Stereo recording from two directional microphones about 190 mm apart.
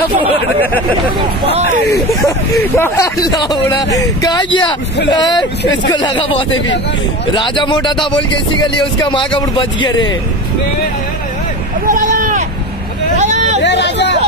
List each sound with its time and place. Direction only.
2.5 s speech: 10° left (ahead or behind)
11.9 s a sound: 45° right (ahead or behind)
13.1 s vehicle: 35° right (ahead or behind)
13.6 s hubbub: 65° left (ahead or behind)